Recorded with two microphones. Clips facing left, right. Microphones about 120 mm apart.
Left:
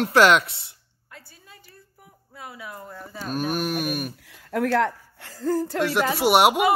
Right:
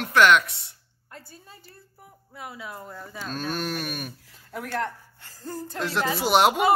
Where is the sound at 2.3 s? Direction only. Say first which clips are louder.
Even; 20° right (ahead or behind).